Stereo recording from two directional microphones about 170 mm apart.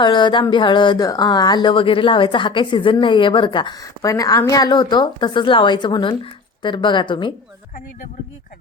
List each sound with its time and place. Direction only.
0.0 s speech: 25° left (ahead or behind)